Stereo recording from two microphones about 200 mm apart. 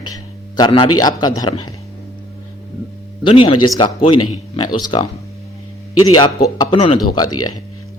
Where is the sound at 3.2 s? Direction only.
25° left (ahead or behind).